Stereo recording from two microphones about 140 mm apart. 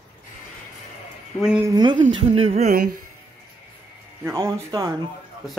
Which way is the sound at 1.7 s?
30° right (ahead or behind).